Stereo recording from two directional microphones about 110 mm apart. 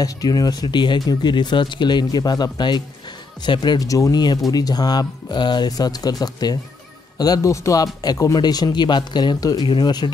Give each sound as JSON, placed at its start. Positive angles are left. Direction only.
{"t": 0.0, "sound": "speech", "side_deg": 35}